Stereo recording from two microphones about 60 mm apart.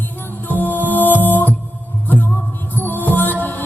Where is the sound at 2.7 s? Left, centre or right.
Left.